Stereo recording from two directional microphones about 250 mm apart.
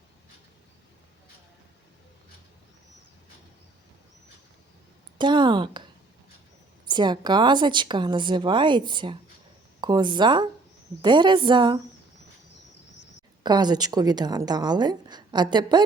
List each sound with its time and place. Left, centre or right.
5.1 s a sound: centre
6.8 s a woman's voice: centre
13.4 s a woman's voice: centre